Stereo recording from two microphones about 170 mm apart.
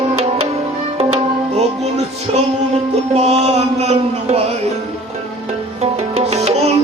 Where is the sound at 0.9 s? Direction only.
40° right (ahead or behind).